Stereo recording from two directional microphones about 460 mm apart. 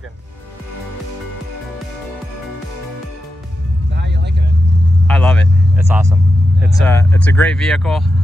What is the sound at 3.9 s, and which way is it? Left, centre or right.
Vehicle, right.